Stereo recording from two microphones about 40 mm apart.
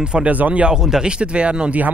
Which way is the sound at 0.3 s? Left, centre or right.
Right.